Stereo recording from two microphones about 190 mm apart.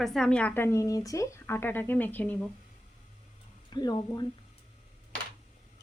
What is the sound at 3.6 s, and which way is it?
Speech, 20° left (ahead or behind).